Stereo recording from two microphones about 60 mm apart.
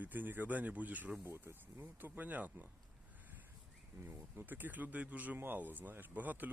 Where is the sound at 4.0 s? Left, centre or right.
Right.